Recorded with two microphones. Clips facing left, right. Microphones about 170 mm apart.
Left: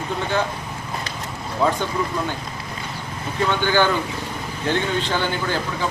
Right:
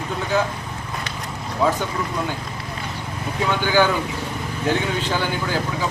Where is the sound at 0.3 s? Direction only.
5° right (ahead or behind).